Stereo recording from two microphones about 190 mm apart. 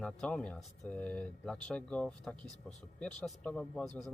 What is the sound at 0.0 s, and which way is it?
Speech, 5° left (ahead or behind).